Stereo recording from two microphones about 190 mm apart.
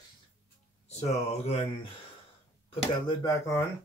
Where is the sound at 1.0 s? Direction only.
35° left (ahead or behind).